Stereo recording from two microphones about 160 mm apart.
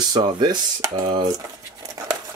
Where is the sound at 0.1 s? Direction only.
25° right (ahead or behind).